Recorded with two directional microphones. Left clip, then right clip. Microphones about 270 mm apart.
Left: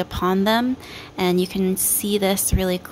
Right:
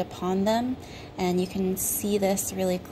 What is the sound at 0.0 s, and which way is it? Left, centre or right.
A woman's voice, left.